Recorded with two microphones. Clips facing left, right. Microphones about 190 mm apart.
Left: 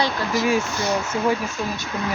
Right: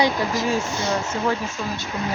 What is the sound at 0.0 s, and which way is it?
Speech, 15° right (ahead or behind).